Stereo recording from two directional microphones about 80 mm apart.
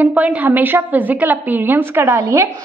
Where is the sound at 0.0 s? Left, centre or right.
Centre.